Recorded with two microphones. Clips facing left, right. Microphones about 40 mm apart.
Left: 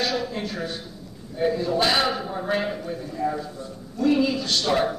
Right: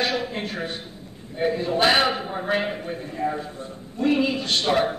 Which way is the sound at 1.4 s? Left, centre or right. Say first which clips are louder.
Right 1 dB; right.